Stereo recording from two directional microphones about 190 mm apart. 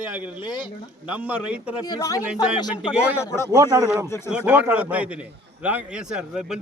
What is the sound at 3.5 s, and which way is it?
Speech, 15° right (ahead or behind).